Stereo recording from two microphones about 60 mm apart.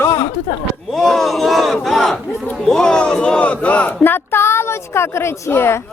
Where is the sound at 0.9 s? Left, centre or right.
Centre.